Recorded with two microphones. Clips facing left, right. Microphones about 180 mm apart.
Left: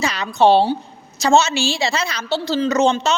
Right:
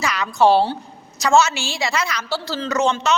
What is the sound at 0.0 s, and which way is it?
A woman's voice, 25° left (ahead or behind).